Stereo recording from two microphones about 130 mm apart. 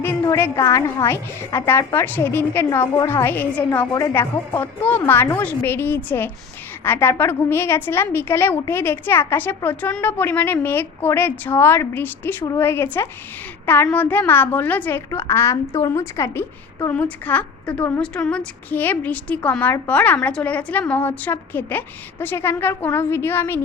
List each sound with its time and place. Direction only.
0.3 s a woman's voice: 20° left (ahead or behind)